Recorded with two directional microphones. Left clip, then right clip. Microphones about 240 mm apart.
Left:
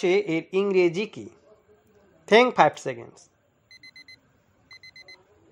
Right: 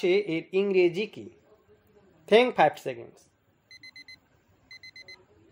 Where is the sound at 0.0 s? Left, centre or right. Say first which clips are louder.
Left 2 dB; centre.